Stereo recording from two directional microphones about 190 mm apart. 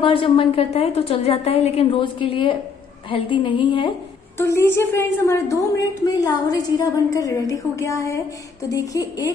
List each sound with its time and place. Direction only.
0.0 s a woman's voice: 25° left (ahead or behind)
4.4 s a woman's voice: 15° left (ahead or behind)